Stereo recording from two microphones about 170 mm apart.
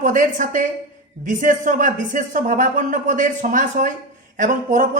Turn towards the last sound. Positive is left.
turn(degrees=-50)  # may be behind; listen again after turning